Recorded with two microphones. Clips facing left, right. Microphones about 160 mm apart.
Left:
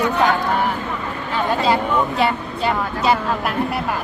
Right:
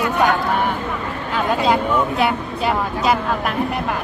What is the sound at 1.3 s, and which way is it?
Speech, centre (ahead or behind).